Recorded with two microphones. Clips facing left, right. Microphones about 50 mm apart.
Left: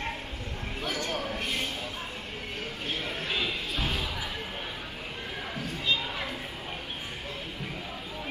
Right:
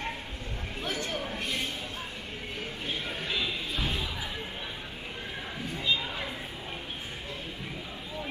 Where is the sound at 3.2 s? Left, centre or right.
Centre.